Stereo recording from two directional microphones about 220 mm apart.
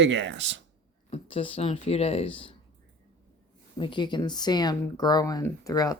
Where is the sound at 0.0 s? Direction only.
55° right (ahead or behind).